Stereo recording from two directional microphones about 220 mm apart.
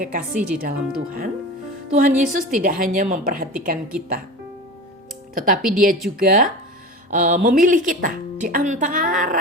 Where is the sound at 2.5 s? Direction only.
40° right (ahead or behind).